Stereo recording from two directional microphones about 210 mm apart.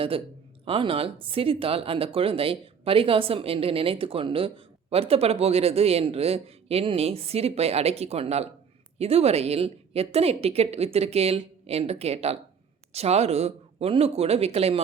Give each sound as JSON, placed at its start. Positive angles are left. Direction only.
{"t": 0.6, "sound": "speech", "side_deg": -25}